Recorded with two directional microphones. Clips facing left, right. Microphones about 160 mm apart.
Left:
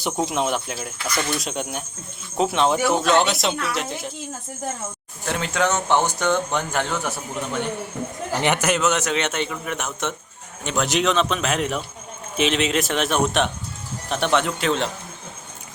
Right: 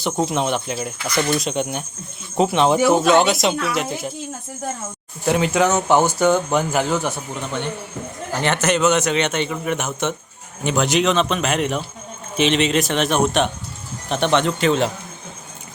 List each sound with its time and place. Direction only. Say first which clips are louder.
0.0 s a man's voice: right 2 dB; 5° left (ahead or behind)
5.2 s speech: right 6 dB; 10° right (ahead or behind)
8.3 s a man's voice: right 2 dB; 15° left (ahead or behind); by 14.8 s centre (ahead or behind)